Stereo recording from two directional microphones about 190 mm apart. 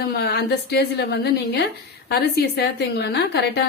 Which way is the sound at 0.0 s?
60° left (ahead or behind).